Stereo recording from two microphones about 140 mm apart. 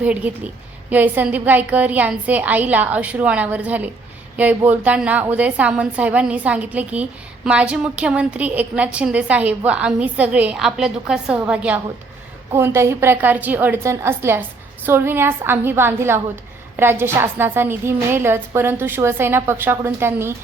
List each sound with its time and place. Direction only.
0.0 s a woman's voice: 10° right (ahead or behind)